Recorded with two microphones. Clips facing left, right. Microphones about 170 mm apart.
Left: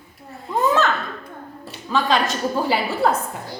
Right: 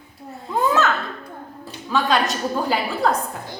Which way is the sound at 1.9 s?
Centre (ahead or behind).